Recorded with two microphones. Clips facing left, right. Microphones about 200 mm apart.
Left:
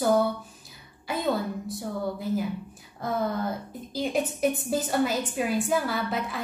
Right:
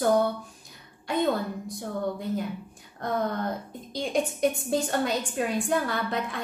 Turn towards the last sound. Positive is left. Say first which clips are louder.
# even
turn(degrees=5)  # may be behind; listen again after turning